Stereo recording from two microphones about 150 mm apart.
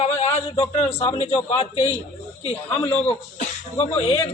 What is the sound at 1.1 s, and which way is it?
Speech, 45° left (ahead or behind).